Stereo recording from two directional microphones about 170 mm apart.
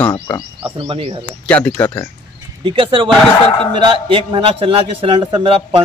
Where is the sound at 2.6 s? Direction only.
30° right (ahead or behind).